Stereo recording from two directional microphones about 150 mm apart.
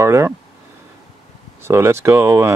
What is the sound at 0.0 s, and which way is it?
Speech, 20° right (ahead or behind).